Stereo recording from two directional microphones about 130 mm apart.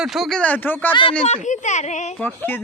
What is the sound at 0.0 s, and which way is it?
Speech, centre (ahead or behind).